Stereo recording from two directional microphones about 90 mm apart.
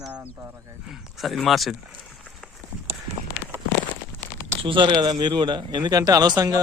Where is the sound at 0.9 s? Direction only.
Centre (ahead or behind).